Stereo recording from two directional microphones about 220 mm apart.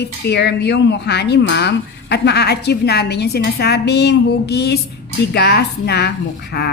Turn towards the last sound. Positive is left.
turn(degrees=50)  # may be behind; listen again after turning